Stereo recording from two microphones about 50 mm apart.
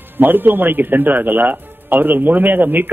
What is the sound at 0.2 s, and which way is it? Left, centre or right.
A man's voice, right.